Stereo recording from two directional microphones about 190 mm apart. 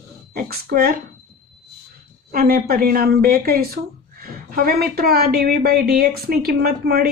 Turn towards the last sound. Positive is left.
turn(degrees=-55)  # may be behind; listen again after turning